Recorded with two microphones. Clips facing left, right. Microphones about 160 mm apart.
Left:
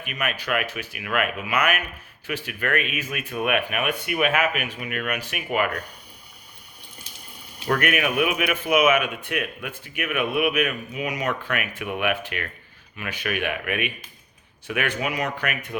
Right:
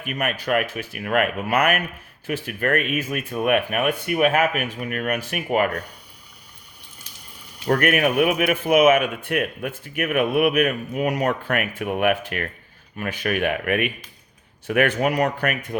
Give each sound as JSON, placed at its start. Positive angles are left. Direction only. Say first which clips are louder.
{"t": 0.0, "sound": "speech", "louder": "right 4 dB", "side_deg": -45}
{"t": 7.7, "sound": "speech", "louder": "right 4 dB", "side_deg": -40}